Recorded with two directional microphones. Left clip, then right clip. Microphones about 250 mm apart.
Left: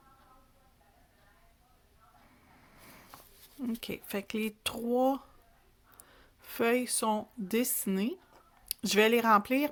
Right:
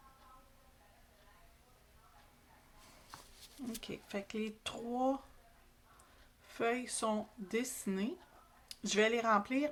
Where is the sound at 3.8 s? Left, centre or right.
Left.